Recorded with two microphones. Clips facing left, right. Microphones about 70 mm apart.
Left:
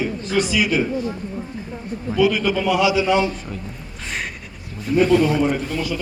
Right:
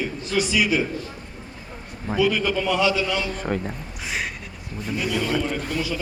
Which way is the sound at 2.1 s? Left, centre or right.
Centre.